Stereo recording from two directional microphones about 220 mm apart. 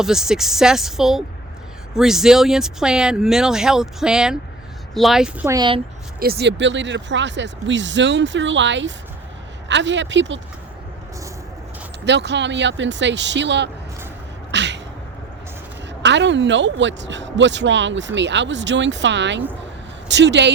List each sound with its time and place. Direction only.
0.0 s speech: centre (ahead or behind)
5.5 s speech: 20° right (ahead or behind)
6.1 s speech: 45° right (ahead or behind)
12.0 s speech: 50° right (ahead or behind)
14.5 s a sound: 55° right (ahead or behind)
16.0 s speech: 55° right (ahead or behind)